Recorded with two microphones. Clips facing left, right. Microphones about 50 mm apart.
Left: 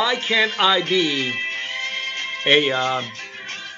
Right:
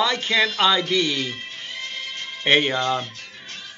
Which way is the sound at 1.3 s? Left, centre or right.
Left.